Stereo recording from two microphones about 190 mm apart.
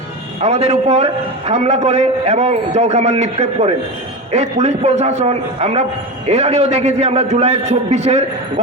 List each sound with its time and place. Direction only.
0.4 s a man's voice: 35° right (ahead or behind)